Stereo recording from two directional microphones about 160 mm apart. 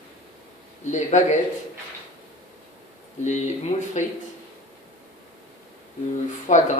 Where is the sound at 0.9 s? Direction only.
50° left (ahead or behind).